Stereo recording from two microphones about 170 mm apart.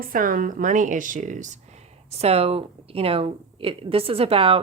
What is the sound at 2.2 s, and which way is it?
Speech, 35° right (ahead or behind).